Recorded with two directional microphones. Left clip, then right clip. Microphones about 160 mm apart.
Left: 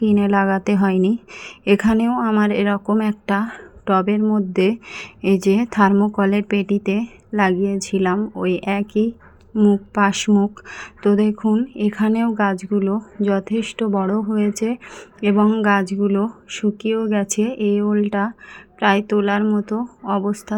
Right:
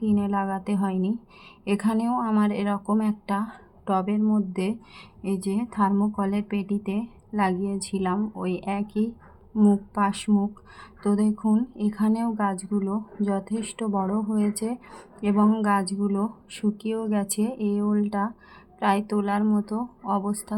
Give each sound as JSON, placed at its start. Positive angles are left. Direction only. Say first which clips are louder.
{"t": 0.1, "sound": "a woman's voice", "louder": "left 8 dB", "side_deg": 35}
{"t": 2.0, "sound": "speech", "louder": "left 6 dB", "side_deg": 15}
{"t": 2.4, "sound": "a woman's voice", "louder": "left 8 dB", "side_deg": 25}
{"t": 5.9, "sound": "a woman's voice", "louder": "left 9 dB", "side_deg": 30}
{"t": 11.4, "sound": "a woman's voice", "louder": "left 6 dB", "side_deg": 15}